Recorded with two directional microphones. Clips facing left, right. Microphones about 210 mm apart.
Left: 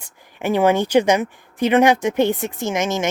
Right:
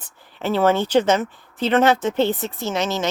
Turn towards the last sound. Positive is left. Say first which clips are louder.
# left 2 dB
turn(degrees=15)  # may be behind; listen again after turning